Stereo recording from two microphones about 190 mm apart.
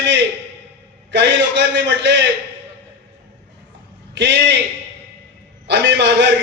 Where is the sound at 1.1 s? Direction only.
65° right (ahead or behind).